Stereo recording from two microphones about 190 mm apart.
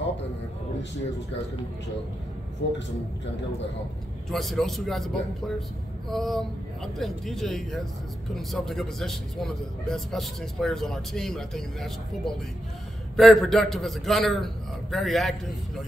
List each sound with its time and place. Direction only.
2.6 s a man's voice: 65° left (ahead or behind)
4.3 s a man's voice: centre (ahead or behind)